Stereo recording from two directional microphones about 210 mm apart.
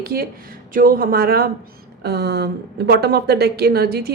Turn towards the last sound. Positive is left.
turn(degrees=-50)  # may be behind; listen again after turning